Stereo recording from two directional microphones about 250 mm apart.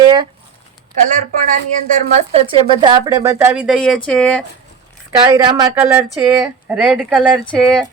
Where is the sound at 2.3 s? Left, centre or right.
Right; by 4.4 s centre.